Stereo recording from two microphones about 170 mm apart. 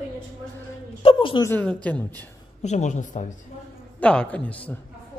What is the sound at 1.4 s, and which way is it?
Speech, 10° left (ahead or behind).